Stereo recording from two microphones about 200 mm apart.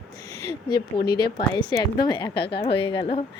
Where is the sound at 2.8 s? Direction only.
25° left (ahead or behind).